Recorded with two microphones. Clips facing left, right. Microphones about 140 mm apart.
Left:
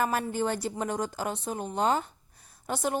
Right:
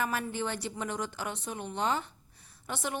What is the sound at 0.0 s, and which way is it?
A woman's voice, 40° left (ahead or behind).